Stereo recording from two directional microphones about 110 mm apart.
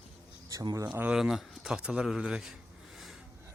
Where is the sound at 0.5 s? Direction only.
35° right (ahead or behind).